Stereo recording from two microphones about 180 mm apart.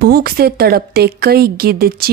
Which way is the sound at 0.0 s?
55° right (ahead or behind).